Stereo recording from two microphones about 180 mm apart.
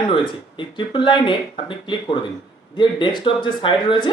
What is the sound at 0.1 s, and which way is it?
Speech, 25° left (ahead or behind).